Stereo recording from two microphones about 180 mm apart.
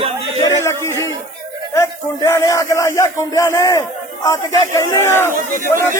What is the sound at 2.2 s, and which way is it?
Speech, 15° left (ahead or behind).